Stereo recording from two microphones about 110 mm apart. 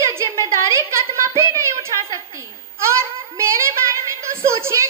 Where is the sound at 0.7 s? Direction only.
25° right (ahead or behind).